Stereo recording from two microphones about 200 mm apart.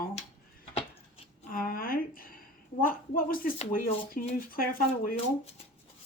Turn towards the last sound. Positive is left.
turn(degrees=45)  # may be behind; listen again after turning